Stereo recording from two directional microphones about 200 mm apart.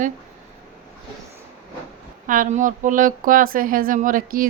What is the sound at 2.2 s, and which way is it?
Speech, 40° right (ahead or behind).